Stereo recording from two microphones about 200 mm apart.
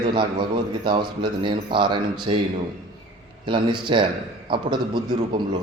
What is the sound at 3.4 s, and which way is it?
A man's voice, 25° right (ahead or behind).